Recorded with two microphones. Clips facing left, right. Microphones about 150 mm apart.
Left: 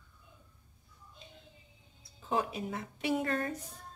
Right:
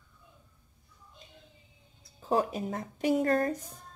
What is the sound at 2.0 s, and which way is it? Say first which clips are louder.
Speech: right 5 dB; 40° right (ahead or behind).